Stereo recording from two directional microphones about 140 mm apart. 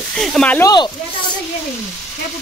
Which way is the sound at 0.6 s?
25° left (ahead or behind).